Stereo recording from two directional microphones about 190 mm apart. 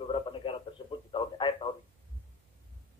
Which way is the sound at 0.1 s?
25° left (ahead or behind).